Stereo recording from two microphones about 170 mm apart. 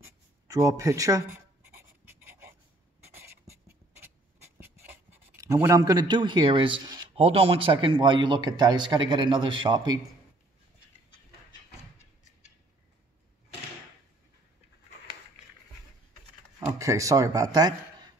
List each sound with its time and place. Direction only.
0.5 s writing: 20° right (ahead or behind)
4.6 s writing: 10° right (ahead or behind)
7.2 s a man's voice: 35° right (ahead or behind)
16.5 s speech: 20° right (ahead or behind)